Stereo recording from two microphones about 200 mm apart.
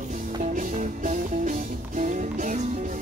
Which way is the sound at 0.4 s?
40° right (ahead or behind).